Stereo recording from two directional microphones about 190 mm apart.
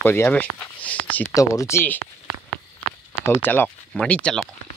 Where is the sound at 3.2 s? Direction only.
10° left (ahead or behind).